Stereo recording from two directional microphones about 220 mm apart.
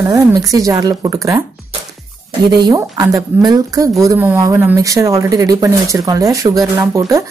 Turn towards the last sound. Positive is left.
turn(degrees=-15)  # may be behind; listen again after turning